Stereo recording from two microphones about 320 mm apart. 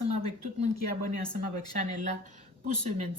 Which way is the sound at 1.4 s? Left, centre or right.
Right.